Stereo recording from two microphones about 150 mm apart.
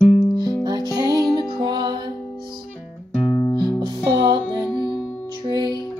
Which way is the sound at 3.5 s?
30° right (ahead or behind).